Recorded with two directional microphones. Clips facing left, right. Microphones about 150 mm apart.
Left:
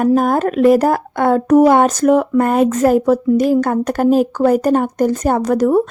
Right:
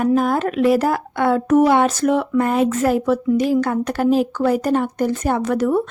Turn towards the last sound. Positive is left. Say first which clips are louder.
# left 4 dB
turn(degrees=40)  # may be behind; listen again after turning